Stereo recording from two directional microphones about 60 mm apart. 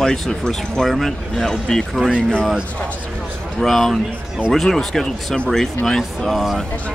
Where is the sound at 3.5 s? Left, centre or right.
Centre.